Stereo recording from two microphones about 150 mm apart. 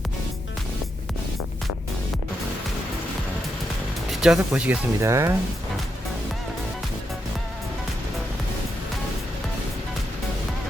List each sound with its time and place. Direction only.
4.1 s speech: 5° right (ahead or behind)
4.9 s speech: 20° right (ahead or behind)